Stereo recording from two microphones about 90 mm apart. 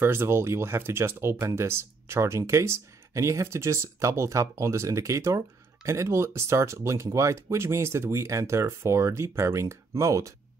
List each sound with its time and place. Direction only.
0.0 s speech: 25° right (ahead or behind)